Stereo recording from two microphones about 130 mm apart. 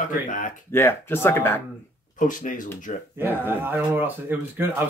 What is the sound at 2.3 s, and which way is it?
Speech, 90° left.